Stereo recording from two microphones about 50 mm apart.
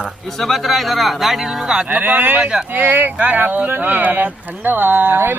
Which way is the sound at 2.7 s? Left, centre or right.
Right.